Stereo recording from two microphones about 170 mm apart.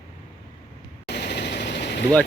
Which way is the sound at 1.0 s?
75° left (ahead or behind).